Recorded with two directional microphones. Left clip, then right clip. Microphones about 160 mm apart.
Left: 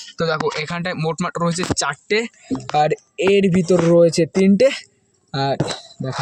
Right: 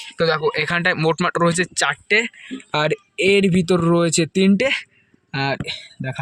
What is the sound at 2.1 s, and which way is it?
Speech, 35° left (ahead or behind).